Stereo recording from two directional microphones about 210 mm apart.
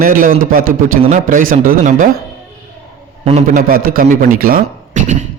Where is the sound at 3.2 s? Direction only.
35° right (ahead or behind).